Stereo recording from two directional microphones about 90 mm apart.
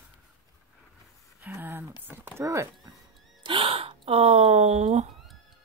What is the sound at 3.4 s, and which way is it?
Gasp, 80° right.